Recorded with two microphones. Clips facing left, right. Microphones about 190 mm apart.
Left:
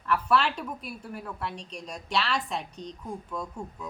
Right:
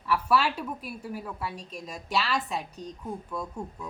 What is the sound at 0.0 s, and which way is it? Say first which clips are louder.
A woman's voice: even; 5° right (ahead or behind).